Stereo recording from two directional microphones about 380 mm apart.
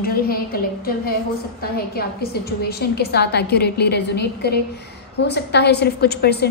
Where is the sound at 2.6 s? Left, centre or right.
Left.